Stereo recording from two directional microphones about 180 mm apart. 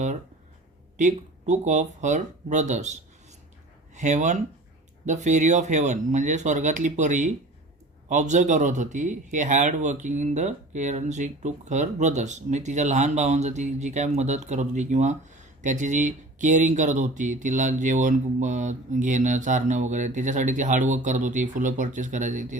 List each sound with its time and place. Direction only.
0.9 s speech: 40° right (ahead or behind)